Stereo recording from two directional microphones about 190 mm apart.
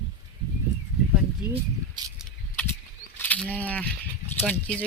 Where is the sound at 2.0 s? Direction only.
25° right (ahead or behind).